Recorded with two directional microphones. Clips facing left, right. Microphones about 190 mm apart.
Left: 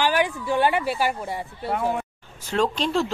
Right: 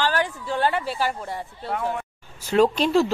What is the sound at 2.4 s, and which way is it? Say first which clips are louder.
Speech: right 5 dB; 10° right (ahead or behind).